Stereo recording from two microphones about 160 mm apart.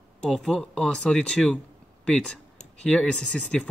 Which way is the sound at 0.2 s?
Centre (ahead or behind).